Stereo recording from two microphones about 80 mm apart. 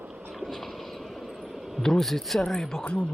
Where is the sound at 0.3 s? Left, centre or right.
Centre.